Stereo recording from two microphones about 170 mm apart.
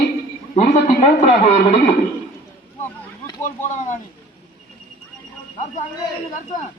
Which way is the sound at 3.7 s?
45° left (ahead or behind).